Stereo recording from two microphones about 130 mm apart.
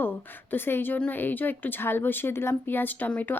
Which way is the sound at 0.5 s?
15° left (ahead or behind).